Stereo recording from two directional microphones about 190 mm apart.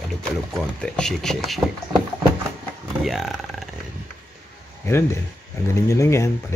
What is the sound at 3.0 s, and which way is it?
Speech, centre (ahead or behind).